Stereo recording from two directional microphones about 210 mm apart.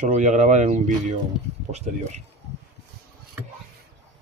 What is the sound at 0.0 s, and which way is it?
Speech, 35° right (ahead or behind).